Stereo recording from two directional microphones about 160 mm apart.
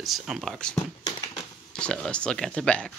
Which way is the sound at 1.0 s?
25° left (ahead or behind).